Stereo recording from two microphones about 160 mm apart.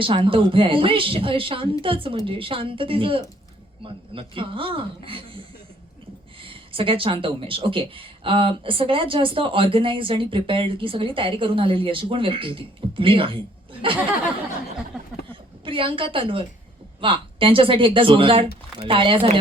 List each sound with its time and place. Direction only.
0.0 s speech: 35° right (ahead or behind)
6.4 s speech: 35° right (ahead or behind)
15.6 s speech: 35° right (ahead or behind)